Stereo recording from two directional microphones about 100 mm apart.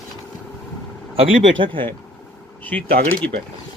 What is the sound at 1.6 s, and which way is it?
Speech, 60° right (ahead or behind).